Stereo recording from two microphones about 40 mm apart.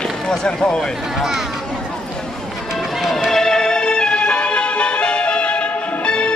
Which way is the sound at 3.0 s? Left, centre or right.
Centre.